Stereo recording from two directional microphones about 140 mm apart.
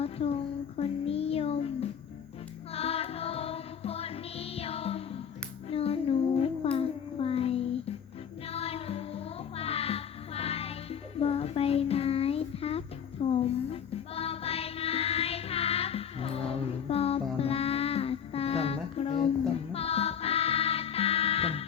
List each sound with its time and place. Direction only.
0.0 s a sound: 45° left (ahead or behind)
0.8 s child singing: 45° left (ahead or behind)
2.7 s music: 45° left (ahead or behind)
5.6 s a sound: 45° left (ahead or behind)
8.4 s music: 45° left (ahead or behind)
11.2 s child singing: 45° left (ahead or behind)
13.3 s music: 45° left (ahead or behind)